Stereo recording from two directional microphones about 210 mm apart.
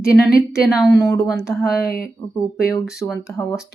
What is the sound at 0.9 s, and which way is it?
Speech, 15° left (ahead or behind).